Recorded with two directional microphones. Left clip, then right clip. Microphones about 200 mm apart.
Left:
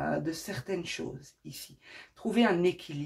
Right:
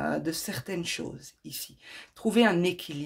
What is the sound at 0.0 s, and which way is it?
Speech, 40° right (ahead or behind).